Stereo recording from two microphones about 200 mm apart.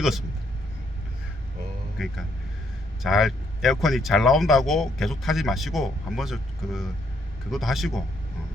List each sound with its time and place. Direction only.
0.0 s speech: centre (ahead or behind)
3.0 s speech: centre (ahead or behind)